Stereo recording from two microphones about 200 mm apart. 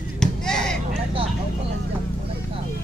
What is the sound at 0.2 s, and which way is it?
Chop, 5° left (ahead or behind).